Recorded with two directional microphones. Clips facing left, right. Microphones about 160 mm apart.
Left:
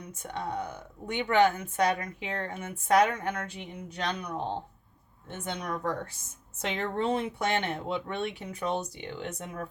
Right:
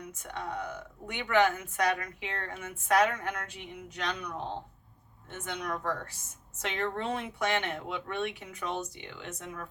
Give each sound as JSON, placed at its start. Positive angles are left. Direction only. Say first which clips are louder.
{"t": 0.1, "sound": "a woman's voice", "louder": "left 4 dB", "side_deg": 30}